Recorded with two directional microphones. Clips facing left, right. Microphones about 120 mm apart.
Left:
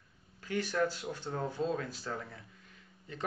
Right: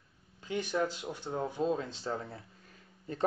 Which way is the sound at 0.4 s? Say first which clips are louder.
Even; 20° right (ahead or behind).